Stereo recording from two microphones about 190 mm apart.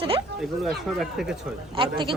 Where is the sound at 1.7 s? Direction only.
25° right (ahead or behind).